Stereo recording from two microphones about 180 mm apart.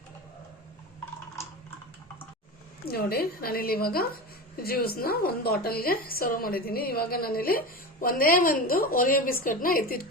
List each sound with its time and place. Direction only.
2.8 s a woman's voice: 60° left (ahead or behind)